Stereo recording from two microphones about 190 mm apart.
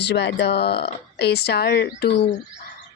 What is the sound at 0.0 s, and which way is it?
A woman's voice, 65° left (ahead or behind).